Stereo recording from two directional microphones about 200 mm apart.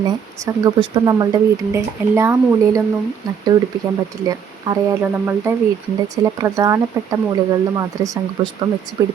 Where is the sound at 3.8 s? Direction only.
15° right (ahead or behind).